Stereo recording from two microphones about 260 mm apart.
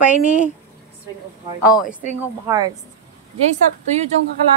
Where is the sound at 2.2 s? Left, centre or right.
Centre.